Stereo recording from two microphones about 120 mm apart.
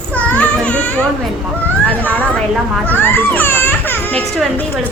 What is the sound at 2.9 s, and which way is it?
Speech, 15° left (ahead or behind).